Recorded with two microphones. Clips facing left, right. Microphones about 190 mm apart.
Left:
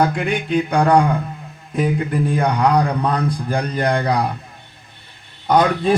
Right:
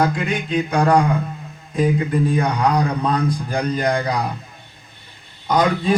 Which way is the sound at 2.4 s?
60° left (ahead or behind).